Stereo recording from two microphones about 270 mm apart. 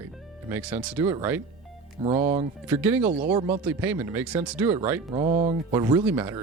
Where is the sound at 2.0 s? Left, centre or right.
Right.